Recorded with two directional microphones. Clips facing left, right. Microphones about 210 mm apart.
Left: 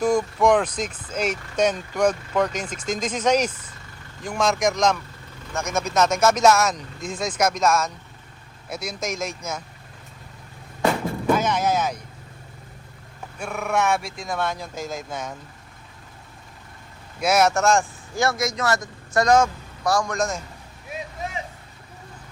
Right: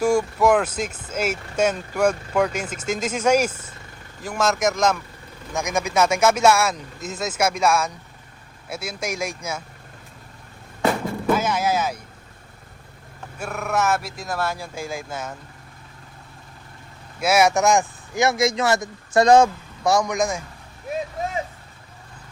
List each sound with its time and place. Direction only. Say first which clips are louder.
0.0 s speech: right 1 dB; 10° right (ahead or behind)
11.3 s speech: even; 5° right (ahead or behind)
13.4 s speech: even; centre (ahead or behind)
17.2 s speech: right 1 dB; 5° right (ahead or behind)